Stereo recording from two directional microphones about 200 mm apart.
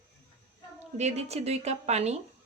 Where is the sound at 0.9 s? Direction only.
35° right (ahead or behind).